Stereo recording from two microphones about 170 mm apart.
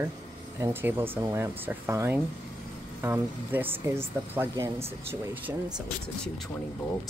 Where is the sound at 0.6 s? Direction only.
15° right (ahead or behind).